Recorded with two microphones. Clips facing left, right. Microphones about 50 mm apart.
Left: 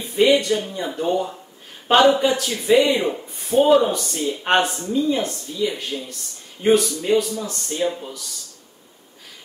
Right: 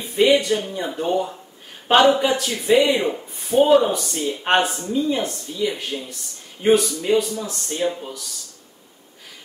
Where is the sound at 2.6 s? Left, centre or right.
Right.